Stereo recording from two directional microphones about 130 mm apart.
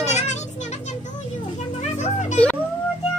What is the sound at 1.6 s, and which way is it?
Music, 65° left (ahead or behind).